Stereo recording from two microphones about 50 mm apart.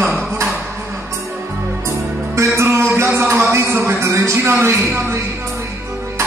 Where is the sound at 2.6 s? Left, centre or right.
Right.